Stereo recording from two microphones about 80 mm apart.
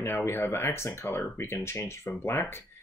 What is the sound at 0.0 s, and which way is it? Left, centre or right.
Speech, left.